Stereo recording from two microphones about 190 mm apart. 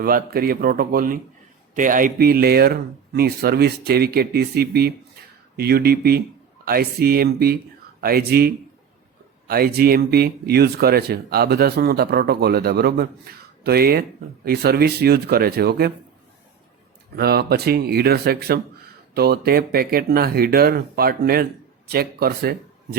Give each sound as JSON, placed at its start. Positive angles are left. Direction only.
{"t": 0.0, "sound": "speech", "side_deg": -50}
{"t": 17.2, "sound": "speech", "side_deg": -55}